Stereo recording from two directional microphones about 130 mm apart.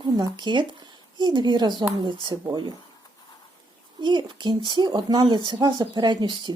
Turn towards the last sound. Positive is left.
turn(degrees=-35)  # may be behind; listen again after turning